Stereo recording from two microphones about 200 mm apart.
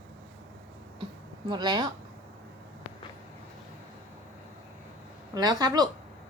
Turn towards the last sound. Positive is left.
turn(degrees=-20)  # may be behind; listen again after turning